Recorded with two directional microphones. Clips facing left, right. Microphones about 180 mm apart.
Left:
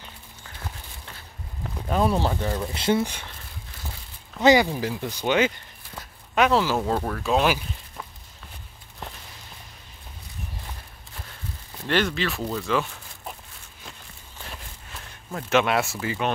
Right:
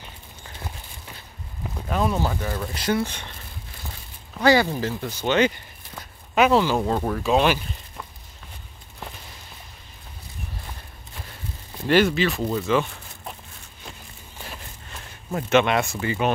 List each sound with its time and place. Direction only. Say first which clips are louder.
1.9 s speech: left 1 dB; 10° left (ahead or behind)
2.1 s speech: left 1 dB; 25° left (ahead or behind)
3.1 s speech: right 1 dB; 5° left (ahead or behind)
4.4 s speech: left 1 dB; 15° left (ahead or behind)
5.9 s a sound: right 2 dB; centre (ahead or behind)
6.8 s speech: right 2 dB; 10° right (ahead or behind)
11.9 s speech: right 5 dB; 10° right (ahead or behind)
14.4 s a sound: right 2 dB; 5° right (ahead or behind)